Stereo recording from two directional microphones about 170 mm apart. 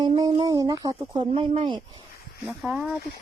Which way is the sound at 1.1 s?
30° right (ahead or behind).